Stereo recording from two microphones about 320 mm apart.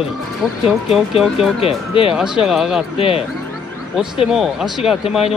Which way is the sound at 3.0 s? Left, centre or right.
Centre.